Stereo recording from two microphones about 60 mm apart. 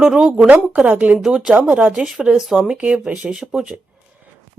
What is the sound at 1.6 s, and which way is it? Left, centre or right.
Speech, centre.